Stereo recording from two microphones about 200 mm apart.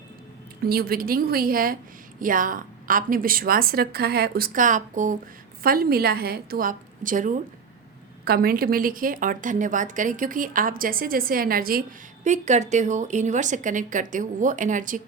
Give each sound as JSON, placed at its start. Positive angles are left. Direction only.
{"t": 0.6, "sound": "a woman's voice", "side_deg": -50}